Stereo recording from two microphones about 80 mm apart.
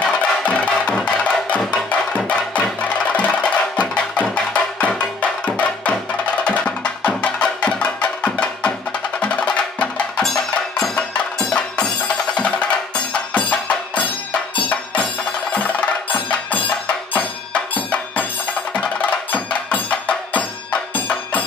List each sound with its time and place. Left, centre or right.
0.0 s music: centre
4.7 s music: centre